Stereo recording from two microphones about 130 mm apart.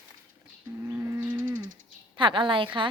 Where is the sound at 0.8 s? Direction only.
20° right (ahead or behind).